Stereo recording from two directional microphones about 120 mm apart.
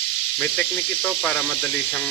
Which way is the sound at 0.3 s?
15° left (ahead or behind).